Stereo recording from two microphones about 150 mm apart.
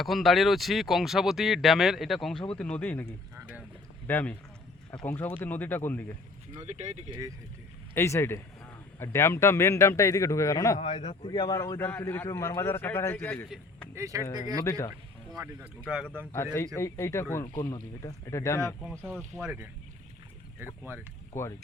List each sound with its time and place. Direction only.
0.0 s a man's voice: centre (ahead or behind)
6.6 s speech: 50° right (ahead or behind)
7.9 s a man's voice: 15° left (ahead or behind)
10.8 s a man's voice: 40° left (ahead or behind)
11.3 s a man's voice: 30° left (ahead or behind); by 13.5 s 10° left (ahead or behind)
13.9 s speech: 20° right (ahead or behind)
14.6 s a man's voice: 20° left (ahead or behind)
15.9 s speech: 5° right (ahead or behind)
16.2 s a man's voice: 15° left (ahead or behind)
21.3 s a man's voice: 20° left (ahead or behind)